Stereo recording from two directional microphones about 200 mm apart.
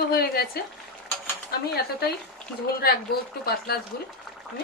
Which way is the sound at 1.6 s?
50° left (ahead or behind).